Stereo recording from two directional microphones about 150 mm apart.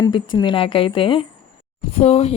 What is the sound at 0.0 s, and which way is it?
Speech, 30° left (ahead or behind).